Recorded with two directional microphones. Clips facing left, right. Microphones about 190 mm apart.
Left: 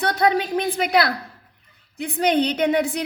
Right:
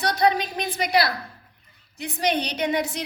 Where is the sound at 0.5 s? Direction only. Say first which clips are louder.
Left 7 dB; 70° left (ahead or behind).